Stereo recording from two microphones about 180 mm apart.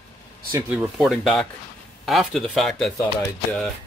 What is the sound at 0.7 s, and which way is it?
Speech, 5° right (ahead or behind).